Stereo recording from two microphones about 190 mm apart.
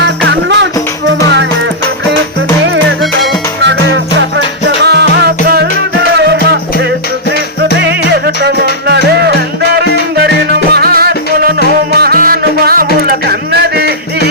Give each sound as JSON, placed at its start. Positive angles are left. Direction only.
{"t": 0.3, "sound": "music", "side_deg": -70}
{"t": 4.8, "sound": "music", "side_deg": -60}
{"t": 7.8, "sound": "music", "side_deg": -60}
{"t": 10.8, "sound": "music", "side_deg": -55}
{"t": 13.2, "sound": "a sound", "side_deg": -60}